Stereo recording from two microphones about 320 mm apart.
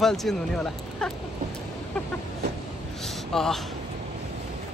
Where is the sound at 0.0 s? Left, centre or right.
Centre.